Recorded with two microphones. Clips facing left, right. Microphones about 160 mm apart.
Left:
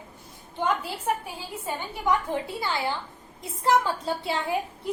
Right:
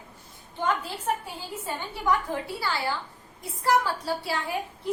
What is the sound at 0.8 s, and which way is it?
A woman's voice, 15° left (ahead or behind).